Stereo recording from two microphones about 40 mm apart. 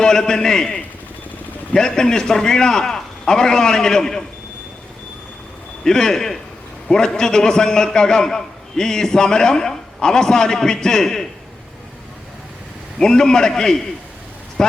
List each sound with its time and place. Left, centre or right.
0.0 s a man's voice: centre
5.8 s a man's voice: centre
13.0 s a man's voice: centre